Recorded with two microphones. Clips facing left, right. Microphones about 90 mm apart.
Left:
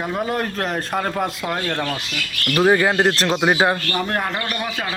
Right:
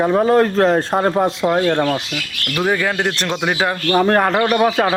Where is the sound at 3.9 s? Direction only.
45° right (ahead or behind).